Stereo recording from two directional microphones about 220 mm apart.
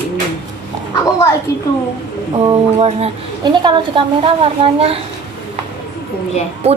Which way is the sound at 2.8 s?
25° right (ahead or behind).